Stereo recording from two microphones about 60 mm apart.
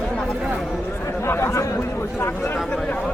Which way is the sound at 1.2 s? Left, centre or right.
Left.